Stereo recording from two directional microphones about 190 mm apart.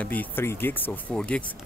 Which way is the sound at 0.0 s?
10° left (ahead or behind).